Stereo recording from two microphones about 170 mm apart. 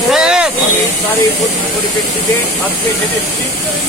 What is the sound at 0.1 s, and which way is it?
Hiss, 5° right (ahead or behind).